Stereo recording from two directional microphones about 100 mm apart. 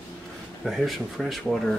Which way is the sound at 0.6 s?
Centre (ahead or behind).